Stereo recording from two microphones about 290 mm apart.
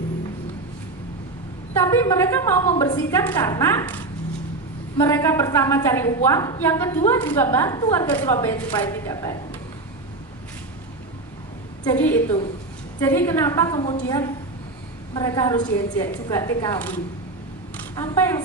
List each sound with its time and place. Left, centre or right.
1.7 s a woman's voice: centre
11.9 s a woman's voice: centre